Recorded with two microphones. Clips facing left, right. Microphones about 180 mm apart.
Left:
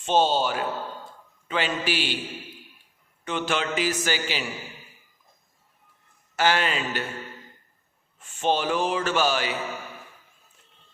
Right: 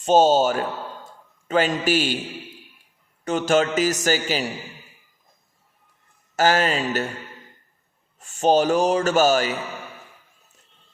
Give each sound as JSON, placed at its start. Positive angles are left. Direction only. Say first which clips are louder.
{"t": 0.0, "sound": "speech", "louder": "right 6 dB", "side_deg": -40}
{"t": 3.2, "sound": "speech", "louder": "right 7 dB", "side_deg": -40}
{"t": 6.3, "sound": "speech", "louder": "right 4 dB", "side_deg": -40}
{"t": 8.2, "sound": "speech", "louder": "right 7 dB", "side_deg": -40}